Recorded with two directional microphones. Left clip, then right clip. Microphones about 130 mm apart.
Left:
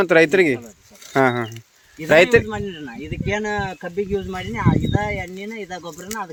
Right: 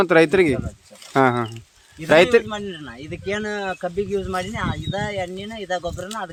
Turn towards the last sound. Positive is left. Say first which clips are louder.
# right 3 dB
turn(degrees=-35)  # may be behind; listen again after turning